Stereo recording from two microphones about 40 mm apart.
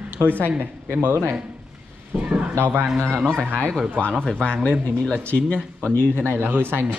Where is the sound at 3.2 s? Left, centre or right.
Centre.